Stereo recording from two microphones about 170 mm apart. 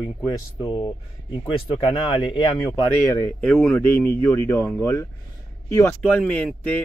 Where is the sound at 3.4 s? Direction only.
5° left (ahead or behind).